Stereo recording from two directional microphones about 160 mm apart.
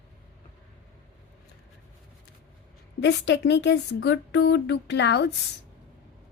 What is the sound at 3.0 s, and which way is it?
Speech, 90° left.